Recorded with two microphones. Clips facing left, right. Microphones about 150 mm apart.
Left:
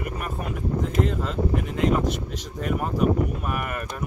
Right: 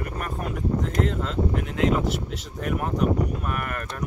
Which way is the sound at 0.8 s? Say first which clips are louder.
Left 1 dB; centre (ahead or behind).